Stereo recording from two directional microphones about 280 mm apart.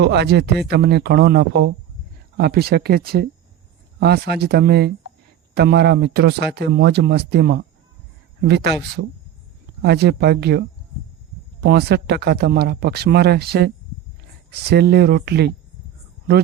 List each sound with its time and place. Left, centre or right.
0.0 s speech: right
11.6 s speech: right